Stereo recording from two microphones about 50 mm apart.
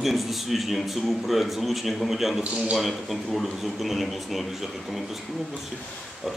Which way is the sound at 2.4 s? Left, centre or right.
Right.